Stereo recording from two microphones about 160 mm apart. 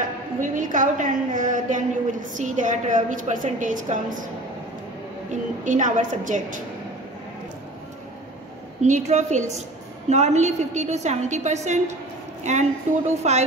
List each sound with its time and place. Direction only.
0.4 s a woman's voice: 55° right (ahead or behind)
5.3 s a woman's voice: 50° right (ahead or behind)
8.8 s a woman's voice: 50° right (ahead or behind)